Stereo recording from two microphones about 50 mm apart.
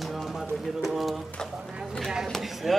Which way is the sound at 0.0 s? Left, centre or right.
Centre.